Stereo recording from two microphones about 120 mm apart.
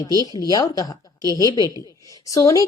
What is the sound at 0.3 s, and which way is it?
Speech, 30° left (ahead or behind).